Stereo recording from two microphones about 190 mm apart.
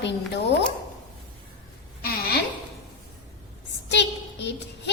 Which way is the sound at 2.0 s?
55° left (ahead or behind).